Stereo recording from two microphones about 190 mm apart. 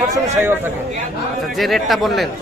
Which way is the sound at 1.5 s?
Centre (ahead or behind).